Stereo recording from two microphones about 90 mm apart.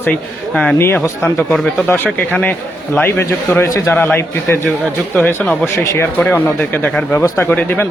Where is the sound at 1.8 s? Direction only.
20° left (ahead or behind).